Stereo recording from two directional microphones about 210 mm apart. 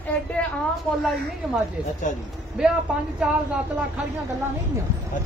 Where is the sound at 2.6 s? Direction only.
5° right (ahead or behind).